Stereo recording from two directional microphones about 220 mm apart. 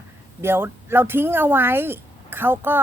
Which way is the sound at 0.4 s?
10° right (ahead or behind).